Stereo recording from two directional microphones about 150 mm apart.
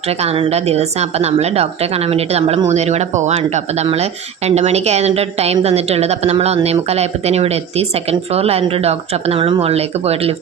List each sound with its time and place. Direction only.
0.1 s speech: 45° right (ahead or behind)